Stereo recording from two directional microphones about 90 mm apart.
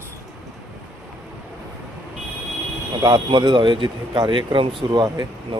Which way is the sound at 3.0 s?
55° right (ahead or behind).